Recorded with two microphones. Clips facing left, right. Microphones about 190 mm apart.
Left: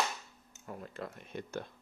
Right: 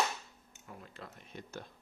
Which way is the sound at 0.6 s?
45° left (ahead or behind).